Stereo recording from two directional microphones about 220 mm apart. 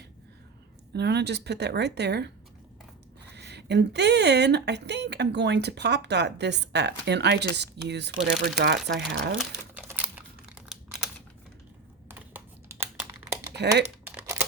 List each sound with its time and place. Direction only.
0.9 s speech: 50° right (ahead or behind)
3.3 s speech: 50° right (ahead or behind)
9.4 s crumpling: 5° right (ahead or behind)
12.0 s computer keyboard: 10° right (ahead or behind)
14.0 s crumpling: 10° right (ahead or behind)